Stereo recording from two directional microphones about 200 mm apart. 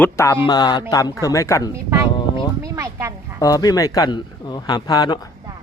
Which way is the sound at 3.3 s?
15° left (ahead or behind).